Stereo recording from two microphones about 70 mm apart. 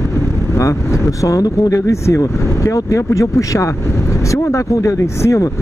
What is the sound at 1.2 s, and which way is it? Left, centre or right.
Speech, left.